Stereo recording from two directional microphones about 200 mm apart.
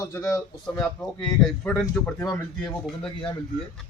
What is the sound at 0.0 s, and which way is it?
Speech, 15° left (ahead or behind).